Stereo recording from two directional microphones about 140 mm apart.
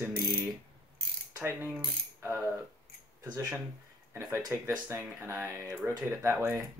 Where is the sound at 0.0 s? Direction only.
15° right (ahead or behind).